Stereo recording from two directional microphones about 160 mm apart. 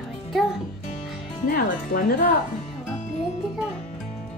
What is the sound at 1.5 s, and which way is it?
Speech, 65° left (ahead or behind).